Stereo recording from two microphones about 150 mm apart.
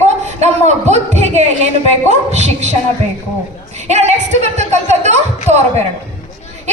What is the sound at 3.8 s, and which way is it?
A woman's voice, 45° right (ahead or behind).